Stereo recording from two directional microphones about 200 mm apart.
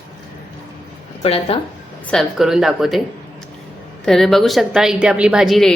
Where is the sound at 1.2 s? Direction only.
30° left (ahead or behind).